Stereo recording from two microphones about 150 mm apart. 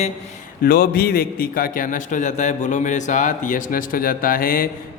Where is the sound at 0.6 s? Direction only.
85° left.